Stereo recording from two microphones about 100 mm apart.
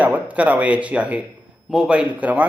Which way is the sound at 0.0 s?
15° right (ahead or behind).